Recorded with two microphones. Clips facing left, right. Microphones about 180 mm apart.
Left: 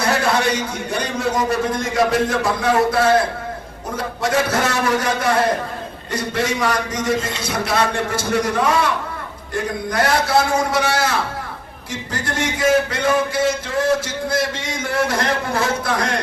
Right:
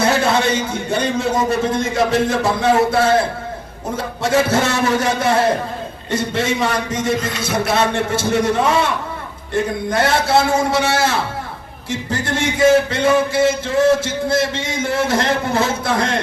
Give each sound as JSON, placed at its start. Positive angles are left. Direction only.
{"t": 0.0, "sound": "speech", "side_deg": -25}
{"t": 9.9, "sound": "speech", "side_deg": -25}